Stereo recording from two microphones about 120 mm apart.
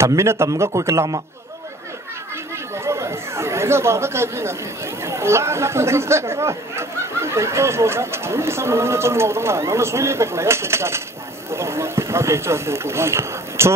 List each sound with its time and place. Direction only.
0.0 s speech: 25° right (ahead or behind)
2.8 s speech: 25° right (ahead or behind)